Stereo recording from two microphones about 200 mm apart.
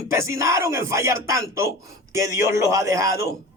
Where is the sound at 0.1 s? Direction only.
15° right (ahead or behind).